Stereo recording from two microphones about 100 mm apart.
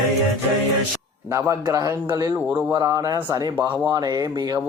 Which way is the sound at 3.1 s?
25° right (ahead or behind).